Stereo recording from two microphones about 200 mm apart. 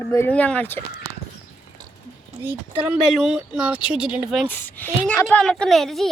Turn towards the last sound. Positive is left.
turn(degrees=0)  # may be behind; listen again after turning